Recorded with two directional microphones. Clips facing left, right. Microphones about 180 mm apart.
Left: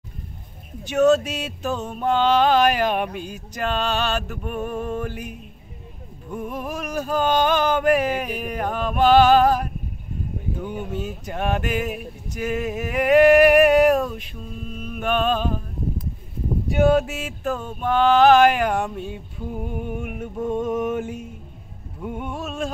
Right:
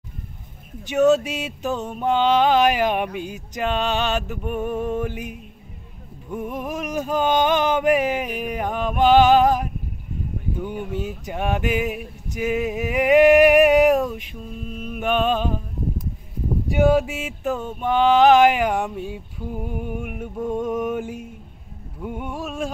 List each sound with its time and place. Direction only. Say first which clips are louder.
0.8 s mantra: even; 15° right (ahead or behind)
10.6 s male singing: right 2 dB; 15° right (ahead or behind)
16.7 s mantra: even; 10° right (ahead or behind)
20.6 s music: even; centre (ahead or behind)
22.0 s mantra: even; 10° right (ahead or behind)